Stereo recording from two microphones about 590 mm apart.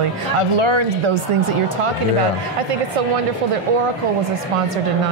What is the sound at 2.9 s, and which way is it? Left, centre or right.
A woman's voice, right.